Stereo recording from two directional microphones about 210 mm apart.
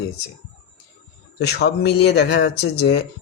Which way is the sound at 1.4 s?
50° left (ahead or behind).